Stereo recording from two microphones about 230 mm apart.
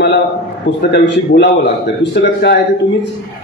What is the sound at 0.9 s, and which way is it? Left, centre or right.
A man's voice, left.